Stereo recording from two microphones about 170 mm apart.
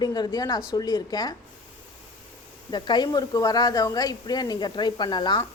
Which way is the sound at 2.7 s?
25° left (ahead or behind).